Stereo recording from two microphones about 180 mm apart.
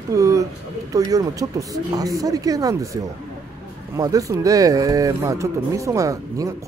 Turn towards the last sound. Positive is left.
turn(degrees=-20)  # may be behind; listen again after turning